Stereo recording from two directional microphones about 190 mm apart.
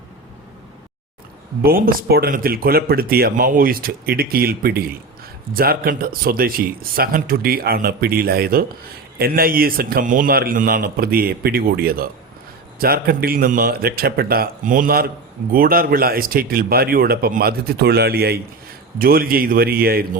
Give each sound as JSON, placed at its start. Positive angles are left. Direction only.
{"t": 1.6, "sound": "speech", "side_deg": -50}